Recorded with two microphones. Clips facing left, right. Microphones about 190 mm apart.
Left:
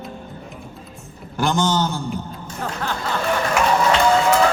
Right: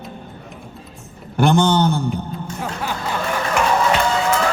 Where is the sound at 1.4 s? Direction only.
60° right (ahead or behind).